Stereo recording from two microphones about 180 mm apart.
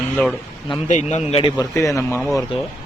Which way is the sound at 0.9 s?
40° left (ahead or behind).